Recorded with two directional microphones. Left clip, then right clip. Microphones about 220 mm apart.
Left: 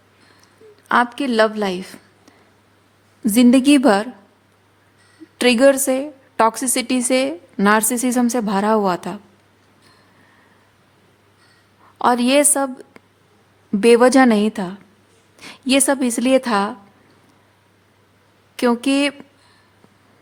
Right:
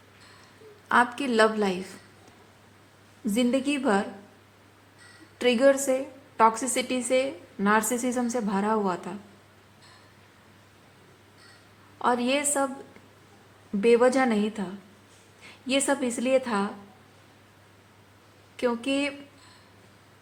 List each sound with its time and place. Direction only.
0.9 s a woman's voice: 40° left (ahead or behind)
3.3 s a woman's voice: 50° left (ahead or behind)
5.4 s a woman's voice: 45° left (ahead or behind)
11.9 s a woman's voice: 50° left (ahead or behind)
13.8 s a woman's voice: 55° left (ahead or behind)
18.5 s a woman's voice: 55° left (ahead or behind)